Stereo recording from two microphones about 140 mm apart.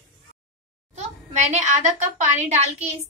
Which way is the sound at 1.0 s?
55° right (ahead or behind).